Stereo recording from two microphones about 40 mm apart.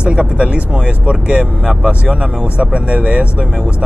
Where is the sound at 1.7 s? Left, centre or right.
Right.